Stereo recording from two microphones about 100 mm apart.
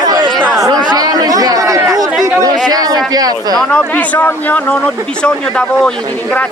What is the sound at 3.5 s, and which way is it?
Speech, 10° left (ahead or behind).